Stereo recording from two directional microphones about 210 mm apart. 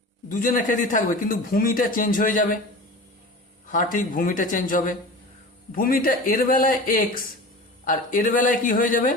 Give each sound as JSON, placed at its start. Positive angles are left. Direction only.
{"t": 0.3, "sound": "a man's voice", "side_deg": 40}
{"t": 3.7, "sound": "a man's voice", "side_deg": 40}